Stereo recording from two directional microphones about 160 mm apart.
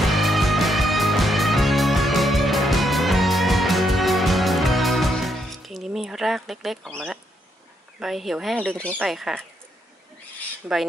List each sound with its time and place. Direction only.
0.0 s music: centre (ahead or behind)
8.0 s speech: centre (ahead or behind)
10.6 s speech: 10° right (ahead or behind)